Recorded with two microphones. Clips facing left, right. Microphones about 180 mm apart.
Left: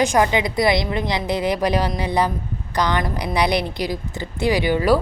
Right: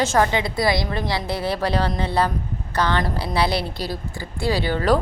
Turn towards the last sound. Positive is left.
turn(degrees=10)  # may be behind; listen again after turning